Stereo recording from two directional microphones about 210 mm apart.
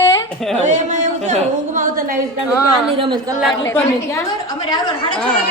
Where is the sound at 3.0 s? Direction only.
25° right (ahead or behind).